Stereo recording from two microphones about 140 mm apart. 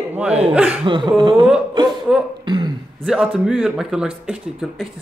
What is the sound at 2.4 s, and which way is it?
Throat clearing, 30° right (ahead or behind).